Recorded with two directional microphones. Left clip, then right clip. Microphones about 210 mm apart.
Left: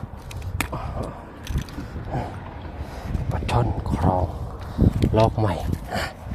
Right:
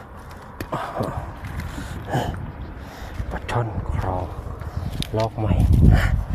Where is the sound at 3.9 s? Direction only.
30° left (ahead or behind).